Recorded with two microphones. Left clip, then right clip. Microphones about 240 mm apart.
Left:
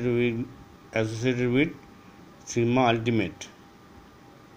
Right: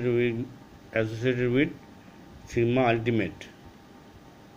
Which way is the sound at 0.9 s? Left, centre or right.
Left.